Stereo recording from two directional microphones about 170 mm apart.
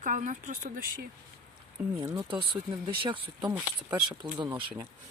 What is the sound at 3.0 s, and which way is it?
Speech, 30° right (ahead or behind).